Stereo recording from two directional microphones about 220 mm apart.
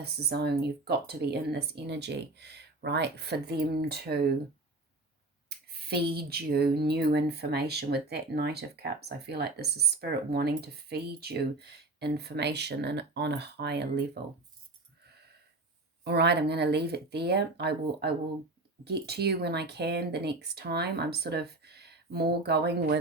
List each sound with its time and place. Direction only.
0.0 s speech: 45° right (ahead or behind)
5.5 s speech: 45° right (ahead or behind)
16.0 s speech: 50° right (ahead or behind)